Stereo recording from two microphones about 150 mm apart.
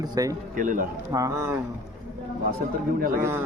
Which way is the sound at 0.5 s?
65° right (ahead or behind).